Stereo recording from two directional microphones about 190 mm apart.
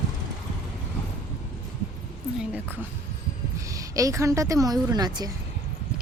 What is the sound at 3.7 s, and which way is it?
A woman's voice, 15° right (ahead or behind).